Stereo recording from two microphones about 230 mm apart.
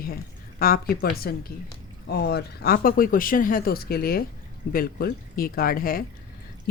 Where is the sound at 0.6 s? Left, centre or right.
Left.